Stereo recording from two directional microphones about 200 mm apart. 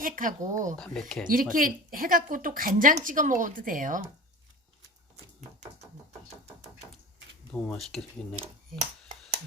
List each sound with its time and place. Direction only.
0.0 s a woman's voice: 40° right (ahead or behind)
0.8 s speech: 5° left (ahead or behind)
1.3 s a woman's voice: 45° right (ahead or behind)
7.5 s speech: 5° left (ahead or behind)